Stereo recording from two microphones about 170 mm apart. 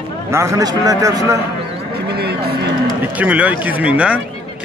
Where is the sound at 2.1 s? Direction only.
70° right (ahead or behind).